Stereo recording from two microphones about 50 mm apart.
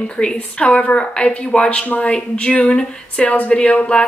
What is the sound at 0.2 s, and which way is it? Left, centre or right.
Speech, centre.